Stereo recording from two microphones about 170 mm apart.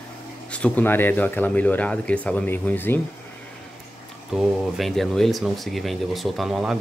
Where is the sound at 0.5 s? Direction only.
10° left (ahead or behind).